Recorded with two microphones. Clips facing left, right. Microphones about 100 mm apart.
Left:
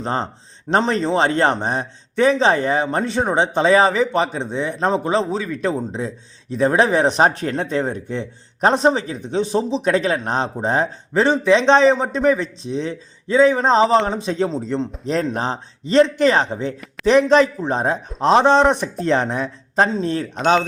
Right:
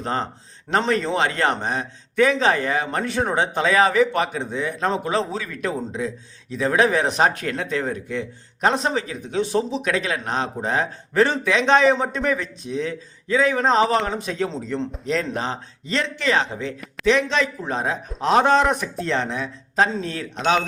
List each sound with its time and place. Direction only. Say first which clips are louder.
0.0 s a man's voice: left 2 dB; 25° left (ahead or behind)
5.5 s a man's voice: left 3 dB; 30° left (ahead or behind)
11.2 s a man's voice: left 4 dB; 20° left (ahead or behind)
15.0 s a man's voice: left 3 dB; 40° left (ahead or behind)
19.9 s a man's voice: left 6 dB; 30° left (ahead or behind)